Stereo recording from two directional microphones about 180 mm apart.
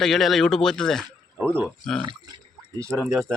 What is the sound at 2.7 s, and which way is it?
Speech, 15° right (ahead or behind).